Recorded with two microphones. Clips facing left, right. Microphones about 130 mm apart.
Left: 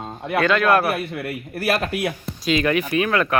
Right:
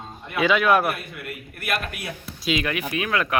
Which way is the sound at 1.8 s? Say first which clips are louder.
Left 9 dB; 70° left (ahead or behind).